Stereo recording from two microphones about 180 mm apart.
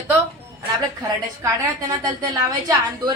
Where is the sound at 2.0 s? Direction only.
20° right (ahead or behind).